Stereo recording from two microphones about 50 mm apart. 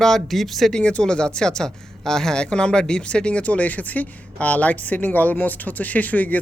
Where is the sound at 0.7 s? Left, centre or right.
Left.